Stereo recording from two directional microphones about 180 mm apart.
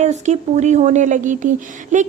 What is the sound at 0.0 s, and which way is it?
Speech, 40° right (ahead or behind).